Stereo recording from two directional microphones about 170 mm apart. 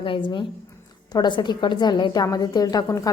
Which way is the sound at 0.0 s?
30° left (ahead or behind).